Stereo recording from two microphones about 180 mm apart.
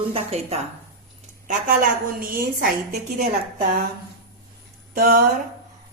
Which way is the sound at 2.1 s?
50° right (ahead or behind).